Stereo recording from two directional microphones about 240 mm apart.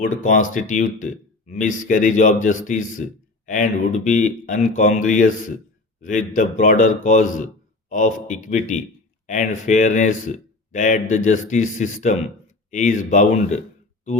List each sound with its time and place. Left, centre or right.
0.0 s speech: left